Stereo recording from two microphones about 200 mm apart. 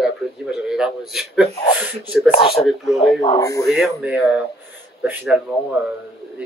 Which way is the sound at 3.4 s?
15° left (ahead or behind).